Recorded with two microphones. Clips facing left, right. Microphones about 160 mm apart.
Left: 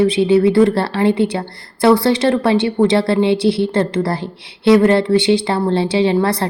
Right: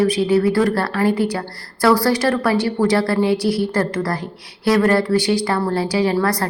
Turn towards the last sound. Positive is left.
turn(degrees=25)  # may be behind; listen again after turning